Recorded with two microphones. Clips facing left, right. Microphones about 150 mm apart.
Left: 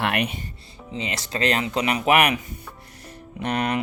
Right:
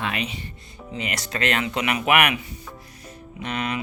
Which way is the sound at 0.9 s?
25° left (ahead or behind).